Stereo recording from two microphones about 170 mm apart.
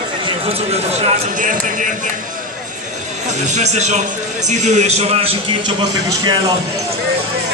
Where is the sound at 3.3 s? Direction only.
45° right (ahead or behind); by 6.5 s 25° right (ahead or behind).